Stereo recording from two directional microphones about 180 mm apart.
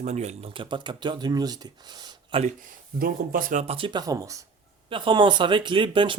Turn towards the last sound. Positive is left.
turn(degrees=-25)  # may be behind; listen again after turning